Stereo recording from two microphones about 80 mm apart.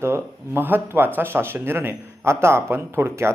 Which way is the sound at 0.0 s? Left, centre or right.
Right.